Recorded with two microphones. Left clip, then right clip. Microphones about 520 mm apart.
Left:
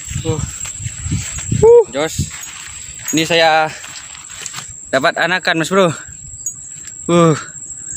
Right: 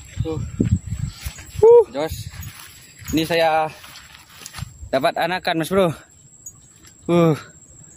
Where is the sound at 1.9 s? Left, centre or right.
Right.